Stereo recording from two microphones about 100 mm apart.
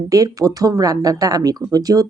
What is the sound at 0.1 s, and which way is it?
Speech, 35° right (ahead or behind).